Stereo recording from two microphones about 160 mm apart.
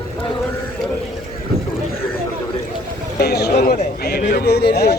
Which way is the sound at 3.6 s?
65° left (ahead or behind).